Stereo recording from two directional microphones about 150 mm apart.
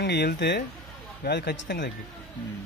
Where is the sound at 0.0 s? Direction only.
90° left.